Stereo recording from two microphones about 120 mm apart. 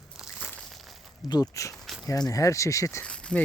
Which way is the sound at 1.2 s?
30° left (ahead or behind).